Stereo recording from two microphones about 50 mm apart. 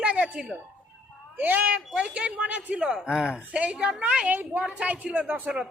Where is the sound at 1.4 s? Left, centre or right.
Right.